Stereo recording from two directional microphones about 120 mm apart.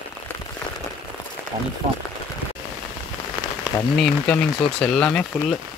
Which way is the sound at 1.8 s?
55° right (ahead or behind).